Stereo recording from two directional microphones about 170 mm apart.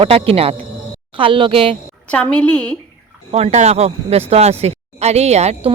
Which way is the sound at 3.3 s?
40° right (ahead or behind).